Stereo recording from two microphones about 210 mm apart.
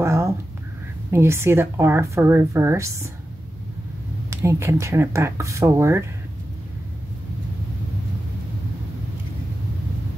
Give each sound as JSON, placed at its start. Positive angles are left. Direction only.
{"t": 0.0, "sound": "a sound", "side_deg": -15}
{"t": 1.1, "sound": "a woman's voice", "side_deg": -10}
{"t": 4.3, "sound": "a woman's voice", "side_deg": -15}